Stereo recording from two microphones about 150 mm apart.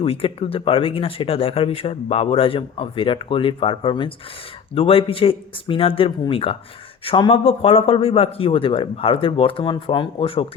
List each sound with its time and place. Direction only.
0.0 s speech: 40° left (ahead or behind)